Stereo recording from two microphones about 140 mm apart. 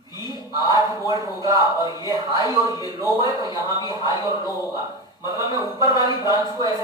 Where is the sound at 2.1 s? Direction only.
25° right (ahead or behind).